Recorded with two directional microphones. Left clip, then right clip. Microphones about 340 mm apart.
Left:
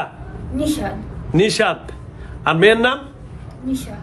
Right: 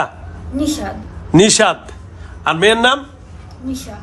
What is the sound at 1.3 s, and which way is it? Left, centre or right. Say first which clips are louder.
A man's voice: right 5 dB; centre.